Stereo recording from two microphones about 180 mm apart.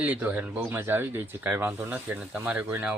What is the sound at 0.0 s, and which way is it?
Speech, 10° right (ahead or behind).